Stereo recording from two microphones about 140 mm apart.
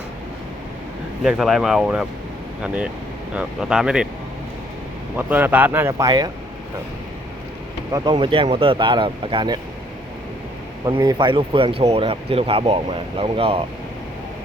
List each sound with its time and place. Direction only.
1.2 s speech: centre (ahead or behind)
3.3 s speech: 5° right (ahead or behind)
5.1 s speech: 10° right (ahead or behind)
5.9 s speech: 30° right (ahead or behind)
8.1 s speech: 40° right (ahead or behind)
11.0 s speech: 30° right (ahead or behind)